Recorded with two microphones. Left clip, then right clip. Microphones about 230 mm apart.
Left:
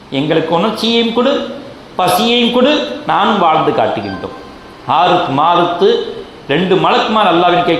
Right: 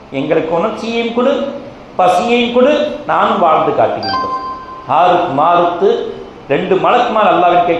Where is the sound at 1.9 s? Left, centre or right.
Left.